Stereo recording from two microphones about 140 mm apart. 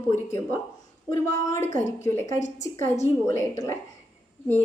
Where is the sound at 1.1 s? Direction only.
20° left (ahead or behind).